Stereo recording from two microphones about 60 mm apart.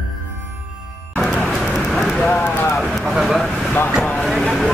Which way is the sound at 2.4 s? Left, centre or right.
Left.